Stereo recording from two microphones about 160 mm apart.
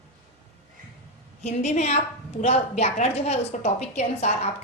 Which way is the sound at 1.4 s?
45° left (ahead or behind).